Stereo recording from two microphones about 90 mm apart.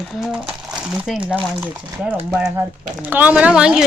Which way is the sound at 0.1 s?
10° right (ahead or behind).